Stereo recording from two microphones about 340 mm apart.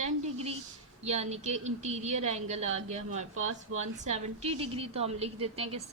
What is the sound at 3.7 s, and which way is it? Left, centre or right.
Speech, right.